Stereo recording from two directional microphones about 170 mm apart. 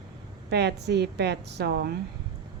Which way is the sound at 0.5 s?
80° right.